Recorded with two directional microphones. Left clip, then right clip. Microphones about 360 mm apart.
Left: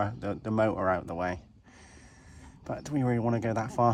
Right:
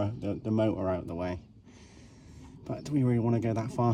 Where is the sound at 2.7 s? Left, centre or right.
Centre.